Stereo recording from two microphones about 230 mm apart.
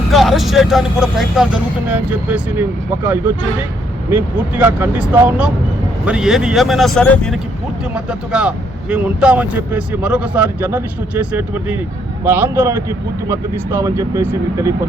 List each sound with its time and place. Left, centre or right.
0.1 s speech: centre